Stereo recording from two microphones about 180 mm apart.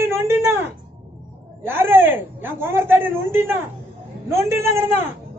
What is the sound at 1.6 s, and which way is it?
A woman's voice, 15° right (ahead or behind).